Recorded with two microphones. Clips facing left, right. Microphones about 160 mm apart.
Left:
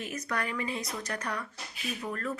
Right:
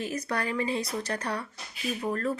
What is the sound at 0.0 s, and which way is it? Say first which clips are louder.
Speech: right 3 dB; 30° right (ahead or behind).